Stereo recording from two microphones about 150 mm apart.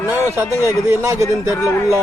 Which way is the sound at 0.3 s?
20° right (ahead or behind).